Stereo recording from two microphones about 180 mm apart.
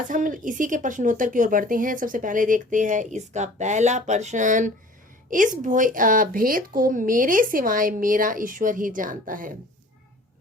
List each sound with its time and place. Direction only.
0.1 s a woman's voice: 45° right (ahead or behind)